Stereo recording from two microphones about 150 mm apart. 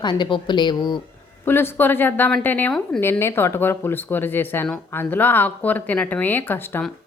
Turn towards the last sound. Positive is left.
turn(degrees=15)  # may be behind; listen again after turning